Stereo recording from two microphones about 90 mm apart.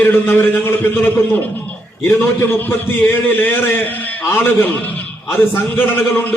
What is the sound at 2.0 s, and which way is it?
A man's voice, 25° left (ahead or behind).